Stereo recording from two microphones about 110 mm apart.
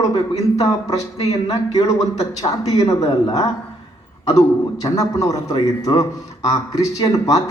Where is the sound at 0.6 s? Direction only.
35° left (ahead or behind).